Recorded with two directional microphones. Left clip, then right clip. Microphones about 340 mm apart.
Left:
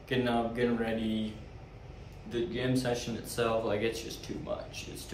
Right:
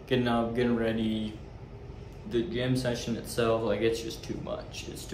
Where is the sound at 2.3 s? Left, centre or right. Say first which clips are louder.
Right 3 dB; centre.